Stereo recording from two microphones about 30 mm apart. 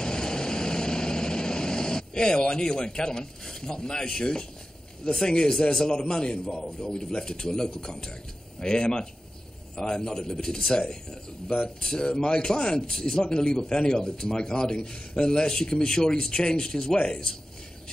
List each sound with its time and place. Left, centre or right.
0.0 s vehicle: left
4.0 s a man's voice: left
12.1 s a man's voice: left